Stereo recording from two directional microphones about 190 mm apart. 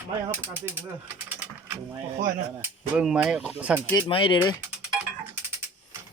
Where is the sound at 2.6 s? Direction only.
5° right (ahead or behind).